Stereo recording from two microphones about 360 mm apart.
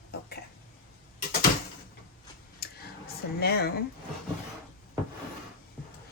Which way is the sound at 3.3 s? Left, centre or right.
Left.